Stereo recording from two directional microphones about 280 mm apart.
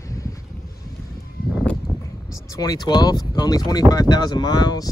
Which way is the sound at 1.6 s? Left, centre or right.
Centre.